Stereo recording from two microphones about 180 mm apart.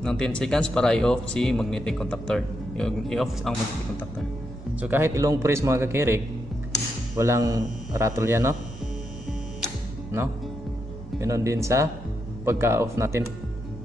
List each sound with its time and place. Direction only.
0.0 s speech: 5° left (ahead or behind)
4.7 s a man's voice: 10° right (ahead or behind)
11.1 s a man's voice: 15° right (ahead or behind)